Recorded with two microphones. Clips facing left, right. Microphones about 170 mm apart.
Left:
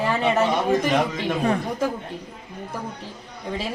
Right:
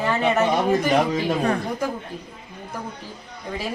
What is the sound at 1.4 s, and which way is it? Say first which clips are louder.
Speech: left 1 dB; 10° left (ahead or behind).